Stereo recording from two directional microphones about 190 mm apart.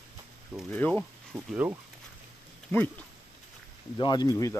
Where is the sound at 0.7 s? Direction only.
10° left (ahead or behind).